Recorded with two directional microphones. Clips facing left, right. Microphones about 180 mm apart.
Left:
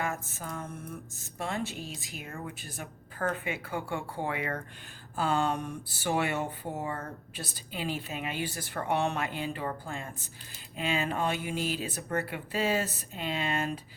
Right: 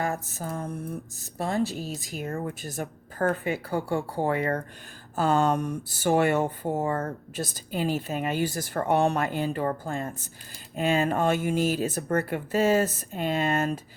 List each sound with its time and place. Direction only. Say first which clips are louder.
0.0 s mantra: right 5 dB; 35° right (ahead or behind)
1.2 s speech: right 7 dB; 35° right (ahead or behind)